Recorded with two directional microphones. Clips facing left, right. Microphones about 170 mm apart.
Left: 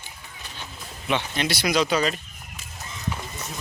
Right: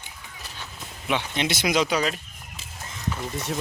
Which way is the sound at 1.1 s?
15° right (ahead or behind).